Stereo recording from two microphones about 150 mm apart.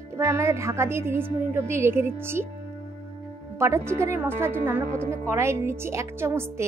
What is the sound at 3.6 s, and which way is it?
Speech, 20° right (ahead or behind).